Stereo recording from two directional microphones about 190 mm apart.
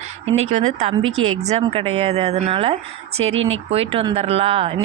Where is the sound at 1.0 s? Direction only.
90° right.